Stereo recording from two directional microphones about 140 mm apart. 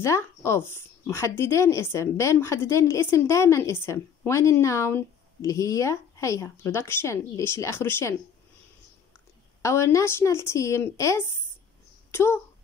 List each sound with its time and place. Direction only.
0.0 s speech: 20° left (ahead or behind)
9.6 s speech: 20° left (ahead or behind)